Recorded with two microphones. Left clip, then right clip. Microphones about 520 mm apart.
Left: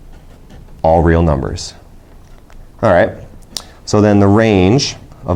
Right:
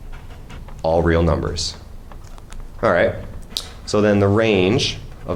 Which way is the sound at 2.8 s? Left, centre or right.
Left.